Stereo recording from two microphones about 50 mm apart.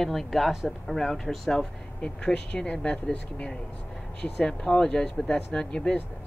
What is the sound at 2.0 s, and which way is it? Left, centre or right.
Speech, centre.